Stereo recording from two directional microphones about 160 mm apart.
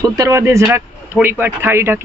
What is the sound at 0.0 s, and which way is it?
A man's voice, 20° right (ahead or behind).